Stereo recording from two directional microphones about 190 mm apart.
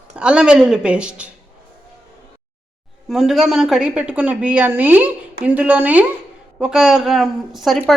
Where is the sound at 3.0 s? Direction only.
Centre (ahead or behind).